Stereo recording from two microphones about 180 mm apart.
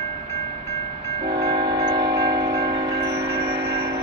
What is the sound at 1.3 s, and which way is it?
Train, 20° right (ahead or behind).